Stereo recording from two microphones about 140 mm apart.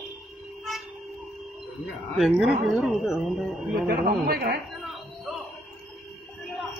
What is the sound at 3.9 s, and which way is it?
Speech, 90° right.